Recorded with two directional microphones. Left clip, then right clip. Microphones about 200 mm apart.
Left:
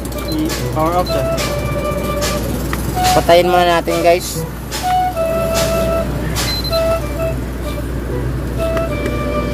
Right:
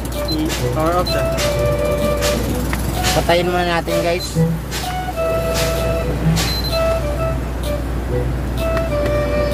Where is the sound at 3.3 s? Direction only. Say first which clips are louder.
Left 7 dB; 20° left (ahead or behind).